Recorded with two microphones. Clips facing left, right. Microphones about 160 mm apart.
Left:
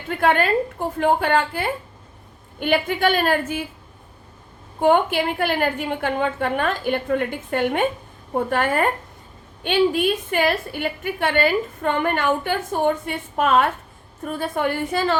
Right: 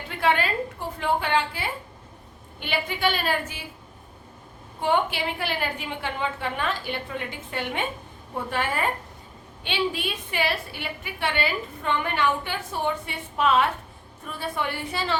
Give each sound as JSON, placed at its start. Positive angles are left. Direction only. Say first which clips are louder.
{"t": 0.1, "sound": "a woman's voice", "louder": "left 6 dB", "side_deg": 50}
{"t": 4.8, "sound": "a woman's voice", "louder": "left 7 dB", "side_deg": 50}